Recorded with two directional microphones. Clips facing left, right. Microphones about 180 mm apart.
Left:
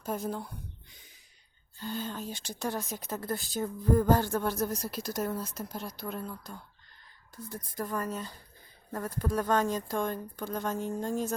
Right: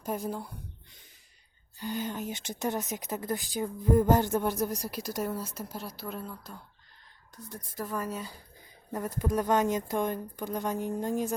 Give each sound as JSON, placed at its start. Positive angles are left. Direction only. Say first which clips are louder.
{"t": 0.3, "sound": "speech", "louder": "even", "side_deg": -5}
{"t": 1.8, "sound": "speech", "louder": "right 2 dB", "side_deg": -15}